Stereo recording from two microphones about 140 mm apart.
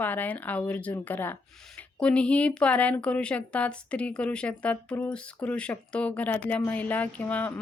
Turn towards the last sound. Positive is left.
turn(degrees=10)  # may be behind; listen again after turning